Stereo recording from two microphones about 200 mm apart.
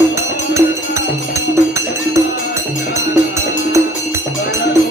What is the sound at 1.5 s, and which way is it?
Music, 15° right (ahead or behind).